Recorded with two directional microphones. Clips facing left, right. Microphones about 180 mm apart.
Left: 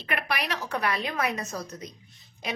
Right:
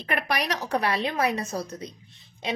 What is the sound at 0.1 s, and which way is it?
A woman's voice, 40° right (ahead or behind).